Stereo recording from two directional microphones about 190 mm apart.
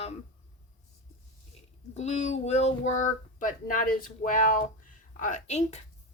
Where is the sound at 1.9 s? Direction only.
35° left (ahead or behind).